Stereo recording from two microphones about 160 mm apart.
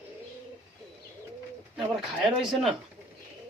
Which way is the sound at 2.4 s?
Centre (ahead or behind).